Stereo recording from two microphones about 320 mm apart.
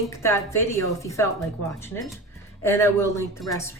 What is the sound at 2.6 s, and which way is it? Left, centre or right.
A woman's voice, centre.